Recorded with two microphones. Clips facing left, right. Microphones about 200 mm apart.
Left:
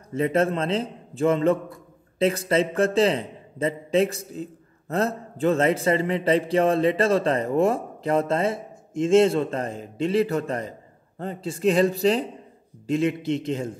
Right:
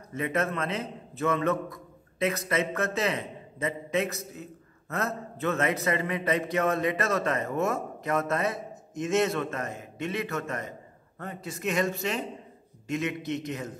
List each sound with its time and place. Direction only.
0.1 s a man's voice: 30° left (ahead or behind)